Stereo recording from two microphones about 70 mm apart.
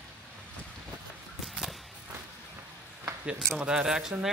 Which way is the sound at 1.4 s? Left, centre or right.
Centre.